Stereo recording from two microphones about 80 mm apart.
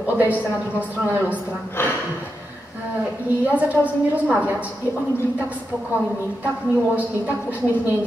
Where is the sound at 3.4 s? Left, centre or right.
Centre.